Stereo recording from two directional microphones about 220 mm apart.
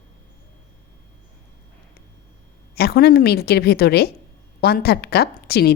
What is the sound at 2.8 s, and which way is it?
A woman's voice, 45° left (ahead or behind).